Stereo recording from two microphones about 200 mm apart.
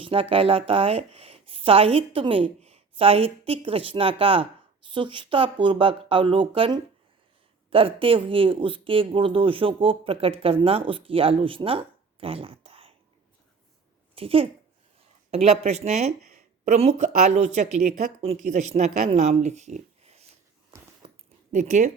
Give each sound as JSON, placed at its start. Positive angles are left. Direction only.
{"t": 0.0, "sound": "speech", "side_deg": -25}
{"t": 14.2, "sound": "speech", "side_deg": -30}
{"t": 20.7, "sound": "a sound", "side_deg": -25}
{"t": 21.5, "sound": "speech", "side_deg": -35}